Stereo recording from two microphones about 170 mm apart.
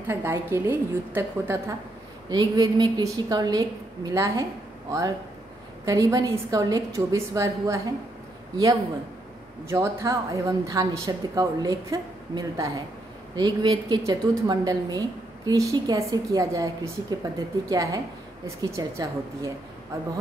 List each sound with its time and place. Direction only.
0.1 s a woman's voice: 15° right (ahead or behind)
5.9 s speech: 20° right (ahead or behind)
9.7 s speech: 20° right (ahead or behind)